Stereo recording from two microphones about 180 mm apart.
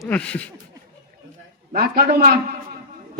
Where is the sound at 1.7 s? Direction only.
60° right (ahead or behind).